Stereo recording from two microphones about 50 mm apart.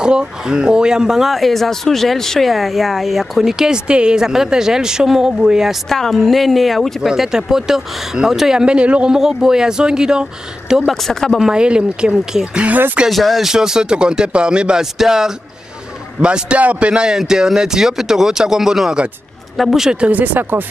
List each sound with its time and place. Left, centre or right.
0.0 s speech: centre
5.9 s a woman's voice: centre
7.0 s speech: centre
9.1 s speech: centre
10.9 s a woman's voice: centre
11.3 s a man's voice: centre
12.6 s speech: right
13.1 s a woman's voice: centre
13.5 s a man's voice: centre
19.9 s speech: right